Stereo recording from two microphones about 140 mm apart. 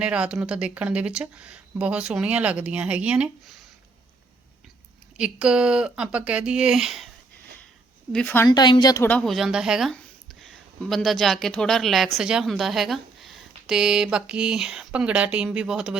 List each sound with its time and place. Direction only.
0.0 s speech: 5° right (ahead or behind)
5.1 s speech: 5° right (ahead or behind)
8.1 s a woman's voice: 10° left (ahead or behind)
8.4 s speech: 30° left (ahead or behind)
9.0 s a woman's voice: 10° left (ahead or behind)
9.3 s speech: 5° right (ahead or behind)